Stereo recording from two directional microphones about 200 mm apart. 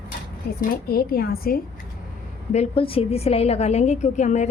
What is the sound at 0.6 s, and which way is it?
A woman's voice, 50° left (ahead or behind).